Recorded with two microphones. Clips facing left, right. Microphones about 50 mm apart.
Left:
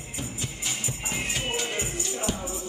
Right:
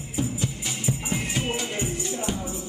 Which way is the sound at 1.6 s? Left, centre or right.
Centre.